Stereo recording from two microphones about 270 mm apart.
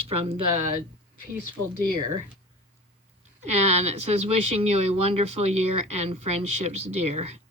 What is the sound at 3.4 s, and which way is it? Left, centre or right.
Speech, right.